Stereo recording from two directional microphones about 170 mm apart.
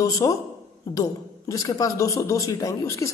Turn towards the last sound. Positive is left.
turn(degrees=15)  # may be behind; listen again after turning